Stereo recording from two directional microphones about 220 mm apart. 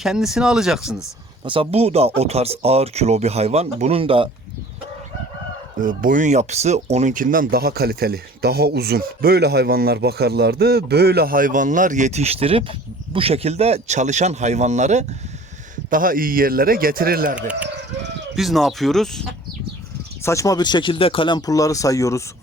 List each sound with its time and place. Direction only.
0.0 s speech: centre (ahead or behind)
1.5 s speech: 25° right (ahead or behind)
5.8 s speech: 40° right (ahead or behind)
18.3 s speech: centre (ahead or behind)
20.2 s speech: 15° left (ahead or behind)